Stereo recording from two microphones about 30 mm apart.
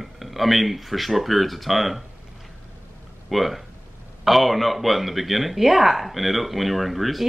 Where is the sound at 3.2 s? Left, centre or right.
Centre.